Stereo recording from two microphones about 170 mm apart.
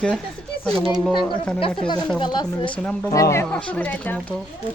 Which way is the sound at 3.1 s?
20° left (ahead or behind).